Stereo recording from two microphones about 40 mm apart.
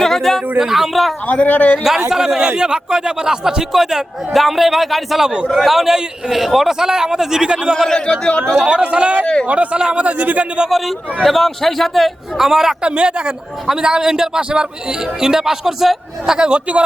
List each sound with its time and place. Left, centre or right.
0.0 s a sound: centre
0.6 s a man's voice: centre
1.3 s a man's voice: left
2.0 s a man's voice: centre
5.2 s speech: right
5.6 s a man's voice: centre
7.4 s speech: right
7.9 s a man's voice: left
8.6 s speech: right
9.2 s a man's voice: left
9.7 s speech: right
10.7 s a man's voice: centre
13.0 s a man's voice: right
16.5 s speech: right